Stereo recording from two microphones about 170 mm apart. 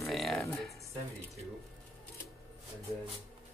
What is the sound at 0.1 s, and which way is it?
Music, centre (ahead or behind).